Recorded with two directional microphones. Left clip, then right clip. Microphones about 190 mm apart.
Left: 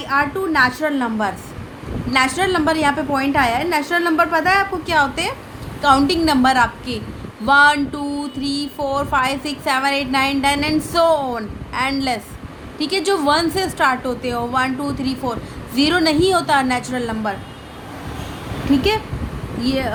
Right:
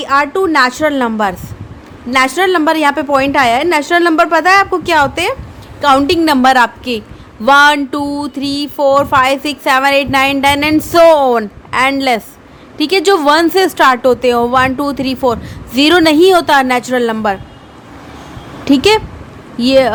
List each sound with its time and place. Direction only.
0.0 s speech: 60° right (ahead or behind)
18.7 s speech: 60° right (ahead or behind)